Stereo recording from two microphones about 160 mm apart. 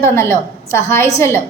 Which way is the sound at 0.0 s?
15° left (ahead or behind).